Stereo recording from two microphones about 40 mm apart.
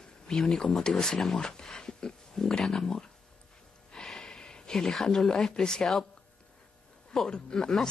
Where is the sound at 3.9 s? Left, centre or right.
Centre.